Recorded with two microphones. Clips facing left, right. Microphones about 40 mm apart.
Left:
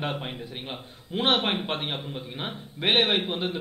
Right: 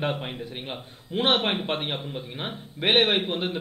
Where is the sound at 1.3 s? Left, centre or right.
Centre.